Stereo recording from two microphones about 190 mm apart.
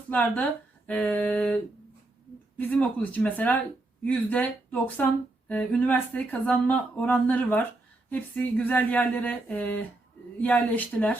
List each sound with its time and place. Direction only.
0.1 s speech: 10° left (ahead or behind)